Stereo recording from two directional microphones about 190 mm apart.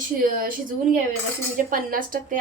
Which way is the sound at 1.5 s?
45° right (ahead or behind).